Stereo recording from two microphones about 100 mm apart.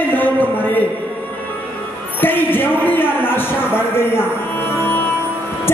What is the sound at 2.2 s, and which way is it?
Speech, 20° left (ahead or behind).